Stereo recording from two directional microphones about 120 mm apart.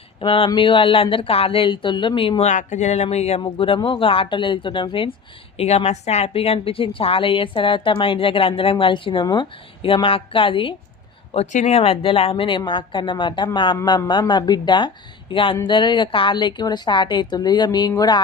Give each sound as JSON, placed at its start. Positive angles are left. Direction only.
{"t": 0.2, "sound": "a woman's voice", "side_deg": 50}
{"t": 2.4, "sound": "speech", "side_deg": 85}
{"t": 3.4, "sound": "a woman's voice", "side_deg": 50}
{"t": 5.5, "sound": "a woman's voice", "side_deg": 65}
{"t": 11.3, "sound": "a woman's voice", "side_deg": 65}